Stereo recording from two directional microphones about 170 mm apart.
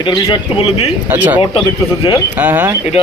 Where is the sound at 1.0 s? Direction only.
10° right (ahead or behind).